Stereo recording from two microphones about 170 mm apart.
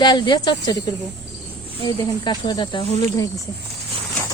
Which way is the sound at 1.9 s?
25° left (ahead or behind).